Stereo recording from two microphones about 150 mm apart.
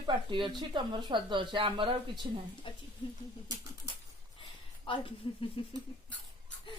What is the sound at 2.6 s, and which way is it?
Speech, 35° left (ahead or behind).